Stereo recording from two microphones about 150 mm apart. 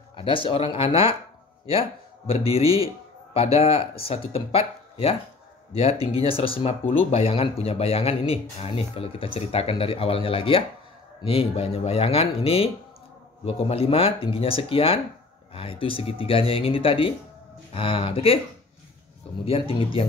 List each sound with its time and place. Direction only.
0.1 s speech: 35° left (ahead or behind)
6.1 s speech: 40° left (ahead or behind)
19.4 s speech: 40° left (ahead or behind)